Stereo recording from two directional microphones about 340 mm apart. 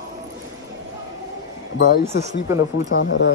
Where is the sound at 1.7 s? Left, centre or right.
Left.